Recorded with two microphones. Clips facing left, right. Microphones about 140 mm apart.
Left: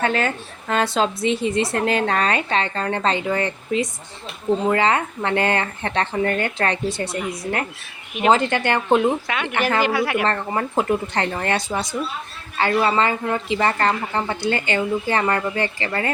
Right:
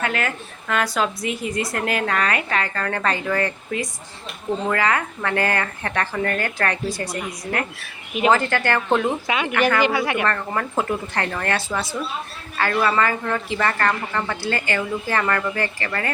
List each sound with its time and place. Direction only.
0.0 s a woman's voice: 30° left (ahead or behind)
9.2 s speech: 5° right (ahead or behind)
9.5 s a woman's voice: 30° left (ahead or behind)
9.8 s speech: centre (ahead or behind)
10.2 s a woman's voice: 25° left (ahead or behind)